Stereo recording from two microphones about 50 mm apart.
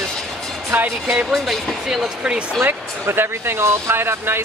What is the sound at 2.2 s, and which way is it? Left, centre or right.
Speech, right.